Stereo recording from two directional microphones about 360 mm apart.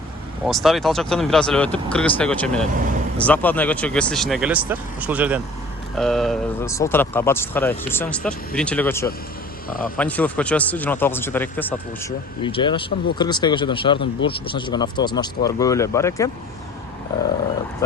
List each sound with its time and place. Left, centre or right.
0.4 s speech: centre
9.6 s speech: left
10.0 s speech: centre